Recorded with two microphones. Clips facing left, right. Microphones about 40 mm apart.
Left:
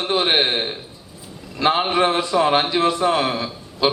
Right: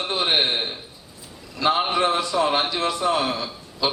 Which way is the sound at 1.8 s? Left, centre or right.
Left.